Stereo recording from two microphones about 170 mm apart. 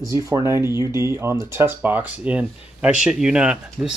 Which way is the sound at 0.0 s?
20° right (ahead or behind).